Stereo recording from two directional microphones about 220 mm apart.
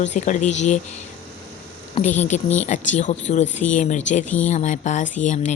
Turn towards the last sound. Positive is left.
turn(degrees=35)  # may be behind; listen again after turning